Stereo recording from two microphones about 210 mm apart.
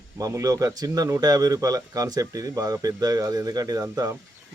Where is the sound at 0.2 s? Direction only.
15° right (ahead or behind).